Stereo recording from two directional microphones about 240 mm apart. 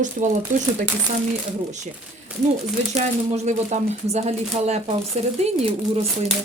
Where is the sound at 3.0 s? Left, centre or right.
Right.